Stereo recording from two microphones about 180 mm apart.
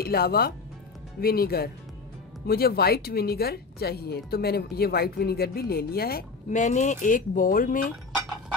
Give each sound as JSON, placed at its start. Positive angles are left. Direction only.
{"t": 0.0, "sound": "speech", "side_deg": 60}